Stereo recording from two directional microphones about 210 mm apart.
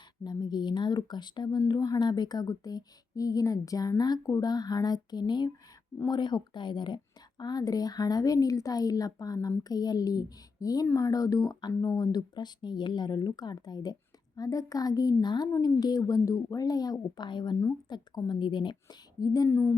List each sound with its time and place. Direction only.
0.3 s speech: 20° left (ahead or behind)